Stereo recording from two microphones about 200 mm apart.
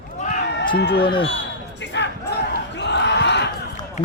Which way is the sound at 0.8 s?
50° left (ahead or behind).